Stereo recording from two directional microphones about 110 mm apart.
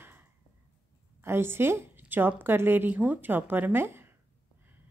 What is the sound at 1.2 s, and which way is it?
A woman's voice, 20° right (ahead or behind).